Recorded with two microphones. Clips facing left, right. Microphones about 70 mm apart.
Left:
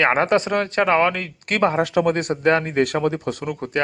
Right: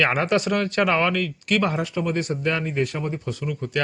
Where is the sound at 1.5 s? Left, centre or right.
Left.